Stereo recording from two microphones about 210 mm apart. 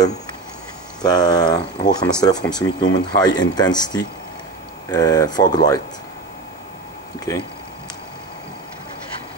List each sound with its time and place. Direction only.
1.0 s speech: 20° left (ahead or behind)
7.3 s speech: 15° left (ahead or behind)